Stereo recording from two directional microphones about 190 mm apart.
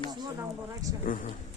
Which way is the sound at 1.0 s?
45° left (ahead or behind).